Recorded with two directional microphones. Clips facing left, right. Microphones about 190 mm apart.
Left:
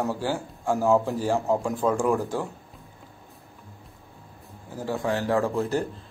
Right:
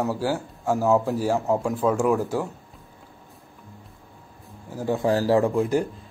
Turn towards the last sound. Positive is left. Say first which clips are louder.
# right 4 dB
turn(degrees=-10)  # may be behind; listen again after turning